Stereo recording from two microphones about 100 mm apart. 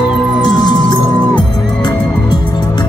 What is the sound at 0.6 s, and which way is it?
Music, 45° left (ahead or behind).